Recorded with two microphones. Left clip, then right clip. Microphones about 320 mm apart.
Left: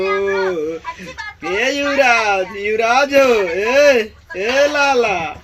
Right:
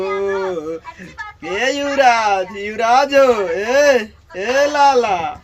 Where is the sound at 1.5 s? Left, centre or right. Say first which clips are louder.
Left 1 dB; centre.